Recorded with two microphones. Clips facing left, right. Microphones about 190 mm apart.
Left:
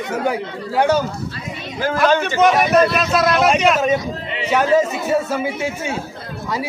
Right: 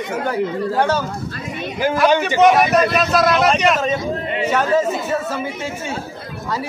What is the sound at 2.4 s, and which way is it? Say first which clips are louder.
A man's voice: even; centre (ahead or behind).